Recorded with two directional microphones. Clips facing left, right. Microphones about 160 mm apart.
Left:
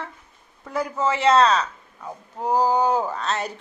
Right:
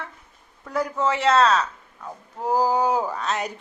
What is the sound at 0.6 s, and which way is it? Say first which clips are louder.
A man's voice: even; centre (ahead or behind).